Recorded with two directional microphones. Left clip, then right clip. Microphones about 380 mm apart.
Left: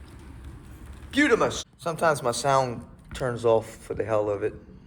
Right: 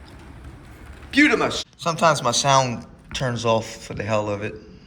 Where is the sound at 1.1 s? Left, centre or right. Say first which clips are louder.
Right 4 dB; centre.